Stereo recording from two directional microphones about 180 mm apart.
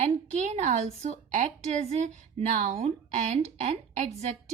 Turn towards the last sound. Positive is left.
turn(degrees=-35)  # may be behind; listen again after turning